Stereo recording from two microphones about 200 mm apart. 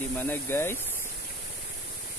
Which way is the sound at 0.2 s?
10° left (ahead or behind).